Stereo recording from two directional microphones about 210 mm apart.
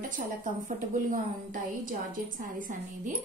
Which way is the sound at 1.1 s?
40° right (ahead or behind).